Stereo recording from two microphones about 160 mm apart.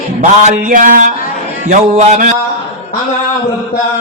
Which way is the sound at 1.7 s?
50° right (ahead or behind).